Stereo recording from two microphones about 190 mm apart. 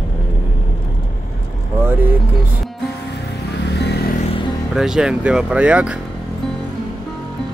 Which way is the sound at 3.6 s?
60° left (ahead or behind).